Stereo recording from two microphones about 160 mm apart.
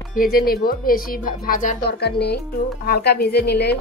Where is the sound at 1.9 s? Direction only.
90° left.